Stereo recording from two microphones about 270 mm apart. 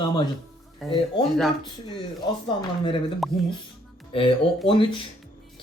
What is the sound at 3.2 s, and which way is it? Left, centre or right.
Speech, centre.